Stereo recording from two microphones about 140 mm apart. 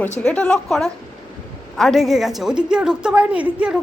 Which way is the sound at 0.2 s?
10° left (ahead or behind).